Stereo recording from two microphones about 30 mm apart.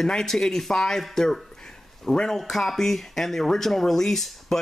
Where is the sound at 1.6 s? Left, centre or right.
Centre.